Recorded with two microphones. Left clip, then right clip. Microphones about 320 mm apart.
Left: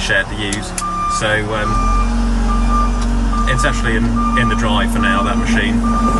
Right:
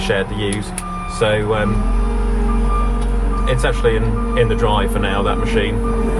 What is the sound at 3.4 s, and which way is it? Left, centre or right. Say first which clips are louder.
A man's voice: right 1 dB; centre.